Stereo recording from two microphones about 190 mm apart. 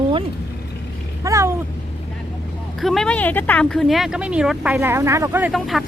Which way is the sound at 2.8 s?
Centre (ahead or behind).